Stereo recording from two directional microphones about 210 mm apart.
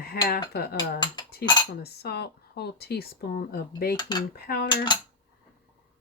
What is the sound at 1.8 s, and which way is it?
Speech, 50° left (ahead or behind).